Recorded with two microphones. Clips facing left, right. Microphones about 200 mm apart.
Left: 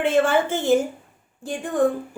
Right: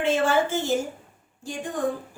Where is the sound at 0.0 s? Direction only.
55° left (ahead or behind).